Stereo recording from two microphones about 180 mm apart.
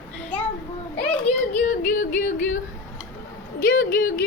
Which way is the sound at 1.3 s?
50° left (ahead or behind).